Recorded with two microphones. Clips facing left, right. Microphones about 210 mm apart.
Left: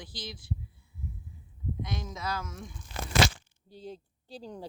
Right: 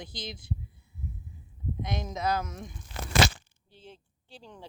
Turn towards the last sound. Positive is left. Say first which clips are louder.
# left 7 dB
turn(degrees=40)  # may be behind; listen again after turning